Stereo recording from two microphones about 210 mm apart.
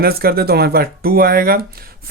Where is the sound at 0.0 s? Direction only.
45° right (ahead or behind).